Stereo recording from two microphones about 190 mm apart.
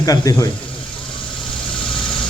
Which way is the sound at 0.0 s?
20° left (ahead or behind).